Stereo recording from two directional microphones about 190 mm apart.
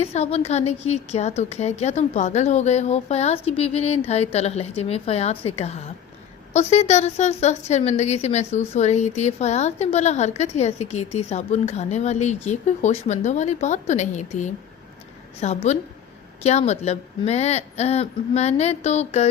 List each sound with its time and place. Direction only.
0.0 s a woman's voice: 35° left (ahead or behind)